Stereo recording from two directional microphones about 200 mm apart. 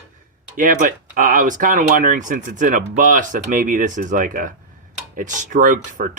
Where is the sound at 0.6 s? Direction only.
40° right (ahead or behind).